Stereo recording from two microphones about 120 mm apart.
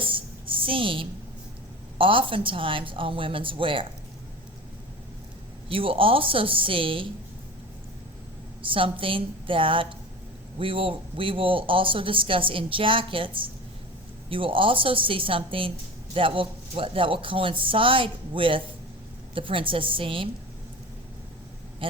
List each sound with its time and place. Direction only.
0.0 s a sound: 45° right (ahead or behind)
2.0 s speech: 45° right (ahead or behind)
5.6 s speech: 50° right (ahead or behind)
8.6 s speech: 45° right (ahead or behind)